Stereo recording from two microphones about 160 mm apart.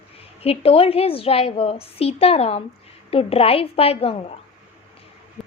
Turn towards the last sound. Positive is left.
turn(degrees=40)  # may be behind; listen again after turning